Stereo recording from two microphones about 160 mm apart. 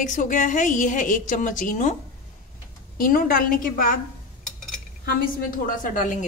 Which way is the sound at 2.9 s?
60° left (ahead or behind).